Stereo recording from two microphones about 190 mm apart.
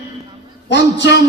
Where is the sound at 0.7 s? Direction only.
65° left (ahead or behind).